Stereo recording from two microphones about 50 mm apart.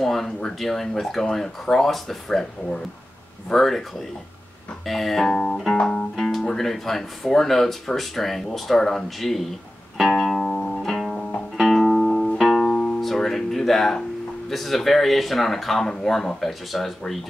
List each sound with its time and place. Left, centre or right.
0.0 s speech: centre
4.8 s speech: centre
5.8 s music: centre
6.1 s speech: centre
9.9 s music: centre
12.7 s music: centre
13.0 s music: centre
14.5 s speech: centre